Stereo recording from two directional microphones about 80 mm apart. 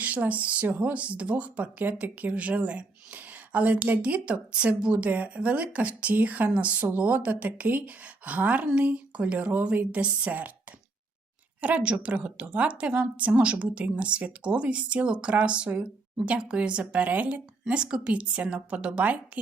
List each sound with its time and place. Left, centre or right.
0.0 s speech: centre